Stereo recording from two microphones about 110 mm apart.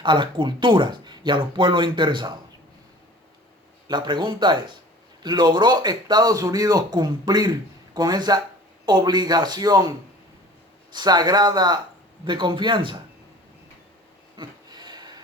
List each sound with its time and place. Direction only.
0.0 s speech: 45° right (ahead or behind)
3.8 s speech: 40° right (ahead or behind)
10.9 s speech: 40° right (ahead or behind)
14.3 s a sound: 40° right (ahead or behind)